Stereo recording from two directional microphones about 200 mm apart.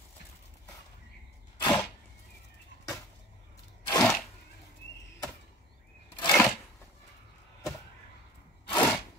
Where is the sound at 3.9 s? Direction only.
15° left (ahead or behind).